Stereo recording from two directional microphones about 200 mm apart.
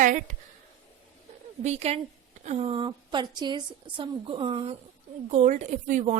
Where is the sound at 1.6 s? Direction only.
30° right (ahead or behind).